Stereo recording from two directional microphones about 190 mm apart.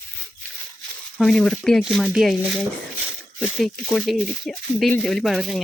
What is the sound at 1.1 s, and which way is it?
Speech, centre (ahead or behind).